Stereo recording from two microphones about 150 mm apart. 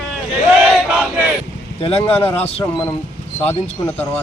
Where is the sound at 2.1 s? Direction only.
15° left (ahead or behind).